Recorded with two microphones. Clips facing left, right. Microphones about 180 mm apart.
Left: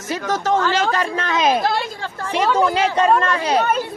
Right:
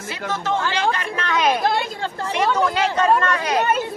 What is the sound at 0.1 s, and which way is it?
Speech, 45° left (ahead or behind).